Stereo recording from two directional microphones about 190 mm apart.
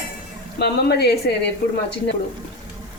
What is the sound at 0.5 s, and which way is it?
Speech, 60° left (ahead or behind).